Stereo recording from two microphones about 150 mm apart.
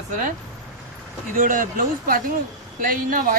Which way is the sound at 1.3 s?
65° right (ahead or behind).